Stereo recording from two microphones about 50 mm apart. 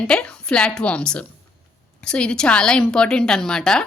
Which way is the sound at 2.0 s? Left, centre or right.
Centre.